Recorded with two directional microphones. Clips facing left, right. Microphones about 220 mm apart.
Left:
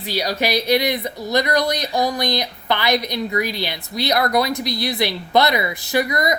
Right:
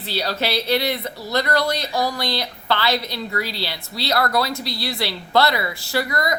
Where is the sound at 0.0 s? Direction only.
15° left (ahead or behind).